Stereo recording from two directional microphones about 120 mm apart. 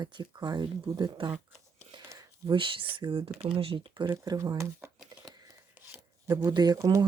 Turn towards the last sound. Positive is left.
turn(degrees=-30)  # may be behind; listen again after turning